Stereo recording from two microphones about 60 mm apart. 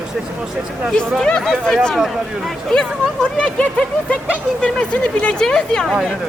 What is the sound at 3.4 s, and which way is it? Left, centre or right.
Speech, centre.